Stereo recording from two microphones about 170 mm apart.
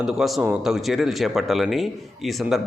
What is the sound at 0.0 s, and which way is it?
Speech, centre (ahead or behind).